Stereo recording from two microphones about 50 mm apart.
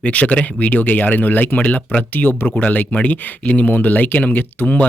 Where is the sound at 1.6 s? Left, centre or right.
Left.